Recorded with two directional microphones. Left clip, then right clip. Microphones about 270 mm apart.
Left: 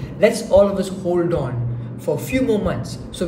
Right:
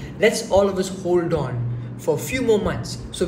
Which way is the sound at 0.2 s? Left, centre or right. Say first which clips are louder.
Left 3 dB; centre.